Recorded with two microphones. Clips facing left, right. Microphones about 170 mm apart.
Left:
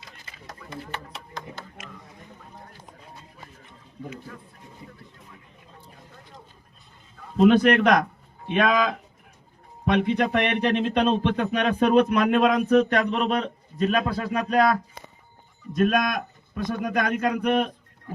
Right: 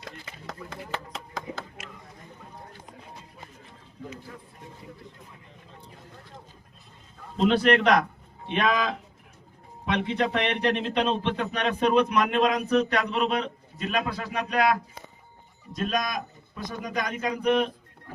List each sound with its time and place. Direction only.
0.0 s a sound: 90° right
7.3 s speech: 50° left (ahead or behind)
15.7 s speech: 55° left (ahead or behind)